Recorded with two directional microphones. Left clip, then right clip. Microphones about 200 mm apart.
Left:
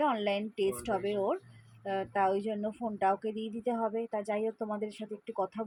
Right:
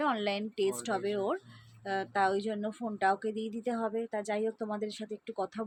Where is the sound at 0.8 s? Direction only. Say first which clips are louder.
Left 1 dB; centre (ahead or behind).